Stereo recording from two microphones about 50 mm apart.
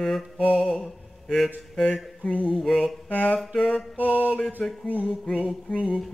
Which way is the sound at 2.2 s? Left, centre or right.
Centre.